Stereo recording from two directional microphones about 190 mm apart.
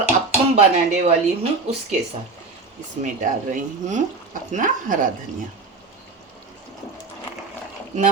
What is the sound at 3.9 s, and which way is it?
Speech, 40° right (ahead or behind).